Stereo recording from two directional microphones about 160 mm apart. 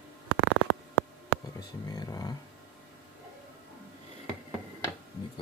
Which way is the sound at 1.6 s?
25° left (ahead or behind).